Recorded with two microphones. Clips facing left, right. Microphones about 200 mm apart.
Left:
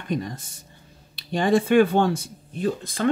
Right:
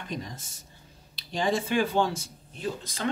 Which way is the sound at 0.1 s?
55° left (ahead or behind).